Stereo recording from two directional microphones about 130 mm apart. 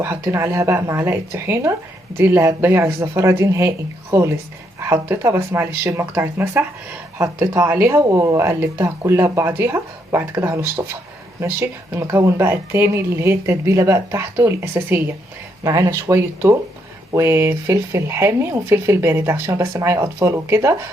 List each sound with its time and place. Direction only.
0.0 s speech: 20° right (ahead or behind)